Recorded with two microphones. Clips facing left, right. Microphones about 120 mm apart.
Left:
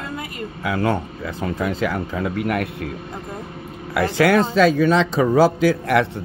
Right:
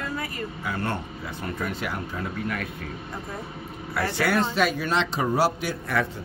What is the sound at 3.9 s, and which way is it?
Speech, 90° left.